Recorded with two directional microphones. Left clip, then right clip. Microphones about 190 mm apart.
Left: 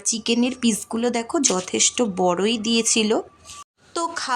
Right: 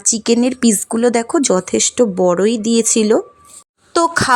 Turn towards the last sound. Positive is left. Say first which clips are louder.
# right 11 dB
turn(degrees=-40)  # may be behind; listen again after turning